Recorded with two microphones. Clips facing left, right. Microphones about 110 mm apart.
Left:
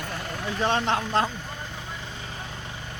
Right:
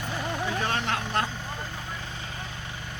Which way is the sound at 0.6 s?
25° left (ahead or behind).